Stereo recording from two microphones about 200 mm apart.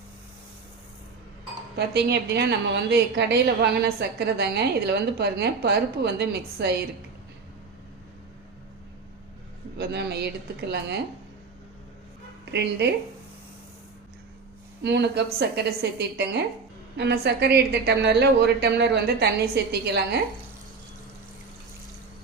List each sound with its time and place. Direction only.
1.7 s a woman's voice: 55° right (ahead or behind)
9.7 s a woman's voice: 55° right (ahead or behind)
12.5 s a woman's voice: 60° right (ahead or behind)
14.8 s a woman's voice: 55° right (ahead or behind)